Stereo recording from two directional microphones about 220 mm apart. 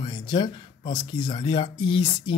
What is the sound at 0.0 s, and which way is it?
Speech, 20° left (ahead or behind).